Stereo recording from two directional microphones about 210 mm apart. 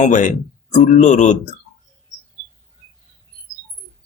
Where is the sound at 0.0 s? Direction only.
35° left (ahead or behind).